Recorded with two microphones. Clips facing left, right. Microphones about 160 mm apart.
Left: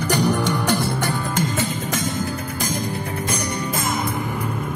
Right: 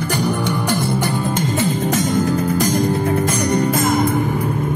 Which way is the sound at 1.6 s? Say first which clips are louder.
Right 6 dB; 35° right (ahead or behind).